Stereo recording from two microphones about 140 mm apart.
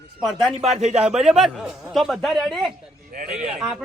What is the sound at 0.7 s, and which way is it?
Speech, 50° right (ahead or behind).